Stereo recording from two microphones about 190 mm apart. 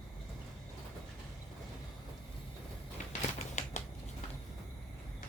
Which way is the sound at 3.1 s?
40° left (ahead or behind).